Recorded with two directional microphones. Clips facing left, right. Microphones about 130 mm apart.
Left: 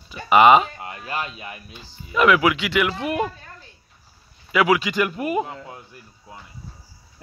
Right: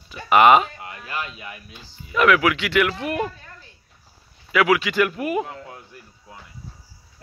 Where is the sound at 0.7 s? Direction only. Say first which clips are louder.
Left 2 dB; 25° left (ahead or behind).